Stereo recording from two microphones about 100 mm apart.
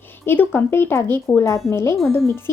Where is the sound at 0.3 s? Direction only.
20° left (ahead or behind).